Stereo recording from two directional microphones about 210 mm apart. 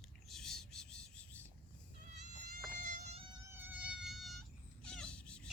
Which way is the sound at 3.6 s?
5° right (ahead or behind).